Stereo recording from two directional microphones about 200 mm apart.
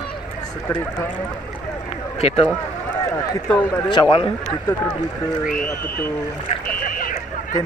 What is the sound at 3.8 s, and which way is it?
Speech, 25° left (ahead or behind).